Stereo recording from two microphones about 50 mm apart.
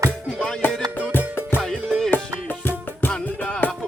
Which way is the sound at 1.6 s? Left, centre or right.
Centre.